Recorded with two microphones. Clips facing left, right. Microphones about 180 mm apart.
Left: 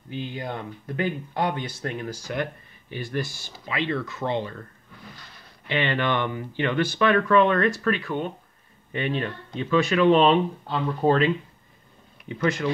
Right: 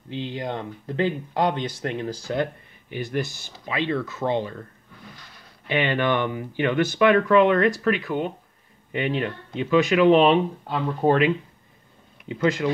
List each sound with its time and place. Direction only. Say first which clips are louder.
0.1 s speech: right 2 dB; 25° right (ahead or behind)
5.7 s speech: right 2 dB; 15° right (ahead or behind)